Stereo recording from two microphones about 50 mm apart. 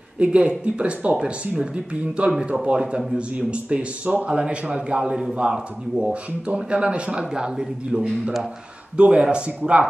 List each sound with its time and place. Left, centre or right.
0.2 s speech: right
8.1 s speech: centre
8.9 s speech: right